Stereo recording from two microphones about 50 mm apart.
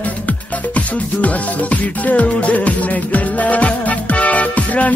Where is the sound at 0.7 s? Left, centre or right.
Left.